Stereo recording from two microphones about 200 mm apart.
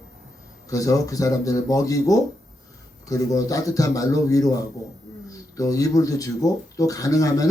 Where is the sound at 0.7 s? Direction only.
15° left (ahead or behind).